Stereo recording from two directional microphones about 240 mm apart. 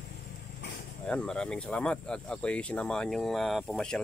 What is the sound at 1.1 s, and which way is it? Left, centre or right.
Speech, centre.